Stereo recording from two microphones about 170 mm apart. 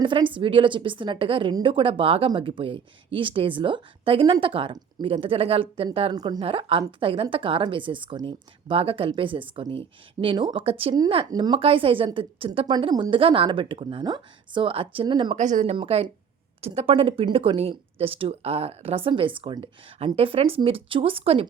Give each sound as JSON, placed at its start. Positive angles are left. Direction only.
{"t": 0.0, "sound": "a woman's voice", "side_deg": -30}
{"t": 6.1, "sound": "speech", "side_deg": -25}
{"t": 6.4, "sound": "a woman's voice", "side_deg": -35}
{"t": 15.4, "sound": "speech", "side_deg": -45}
{"t": 15.7, "sound": "a woman's voice", "side_deg": -35}